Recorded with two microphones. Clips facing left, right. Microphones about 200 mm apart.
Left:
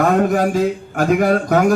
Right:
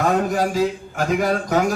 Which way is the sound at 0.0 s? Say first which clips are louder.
Left 4 dB; 50° left (ahead or behind).